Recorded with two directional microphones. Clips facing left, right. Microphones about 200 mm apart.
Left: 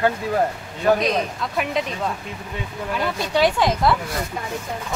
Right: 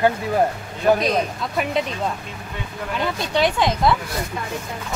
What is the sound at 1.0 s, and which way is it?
Speech, centre (ahead or behind).